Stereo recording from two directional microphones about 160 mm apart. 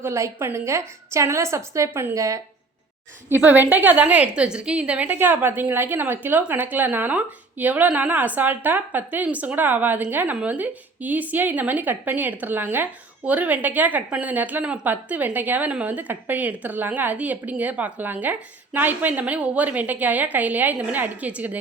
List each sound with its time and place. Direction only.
0.0 s a woman's voice: 15° right (ahead or behind)